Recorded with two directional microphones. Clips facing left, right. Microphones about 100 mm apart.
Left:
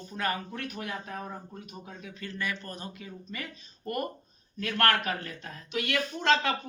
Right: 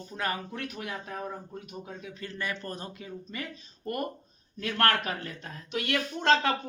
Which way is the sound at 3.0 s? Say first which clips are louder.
Right 2 dB; 20° right (ahead or behind).